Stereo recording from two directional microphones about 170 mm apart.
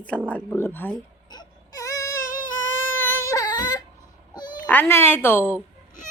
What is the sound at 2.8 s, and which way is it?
Baby cry, 20° left (ahead or behind).